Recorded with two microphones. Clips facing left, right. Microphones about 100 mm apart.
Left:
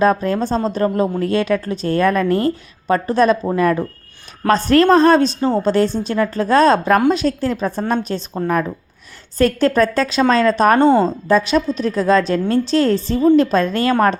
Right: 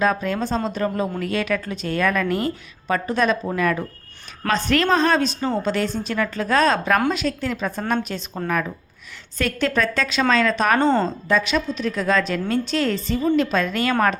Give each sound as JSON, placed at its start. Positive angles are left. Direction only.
{"t": 0.0, "sound": "a woman's voice", "side_deg": 35}
{"t": 9.4, "sound": "a woman's voice", "side_deg": 35}
{"t": 10.8, "sound": "a woman's voice", "side_deg": 15}
{"t": 11.3, "sound": "a woman's voice", "side_deg": 35}